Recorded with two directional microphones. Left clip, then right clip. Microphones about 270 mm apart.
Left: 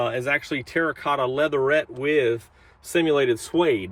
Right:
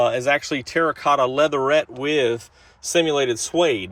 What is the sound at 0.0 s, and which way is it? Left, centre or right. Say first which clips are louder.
Speech: right 5 dB; centre.